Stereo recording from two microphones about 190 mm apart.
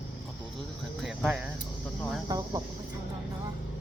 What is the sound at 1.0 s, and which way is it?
Speech, centre (ahead or behind).